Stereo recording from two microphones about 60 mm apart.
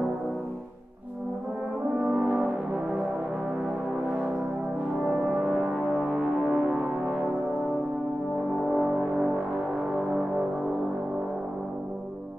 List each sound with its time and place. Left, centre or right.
2.1 s brass instrument: centre
5.5 s music: centre
8.6 s music: centre